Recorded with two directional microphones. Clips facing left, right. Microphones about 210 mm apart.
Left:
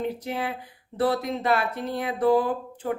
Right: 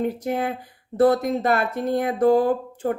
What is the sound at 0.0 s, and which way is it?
Speech, 45° right (ahead or behind).